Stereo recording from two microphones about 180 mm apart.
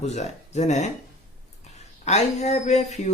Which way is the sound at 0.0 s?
40° left (ahead or behind).